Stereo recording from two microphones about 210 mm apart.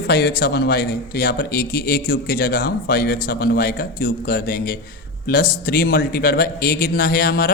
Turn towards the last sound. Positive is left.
turn(degrees=45)  # may be behind; listen again after turning